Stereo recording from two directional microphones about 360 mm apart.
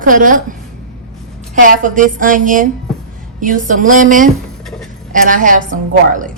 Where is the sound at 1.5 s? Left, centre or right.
Right.